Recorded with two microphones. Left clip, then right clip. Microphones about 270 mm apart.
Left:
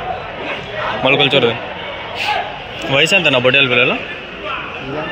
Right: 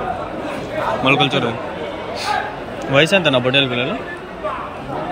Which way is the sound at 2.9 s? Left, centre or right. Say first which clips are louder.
Left 2 dB; centre.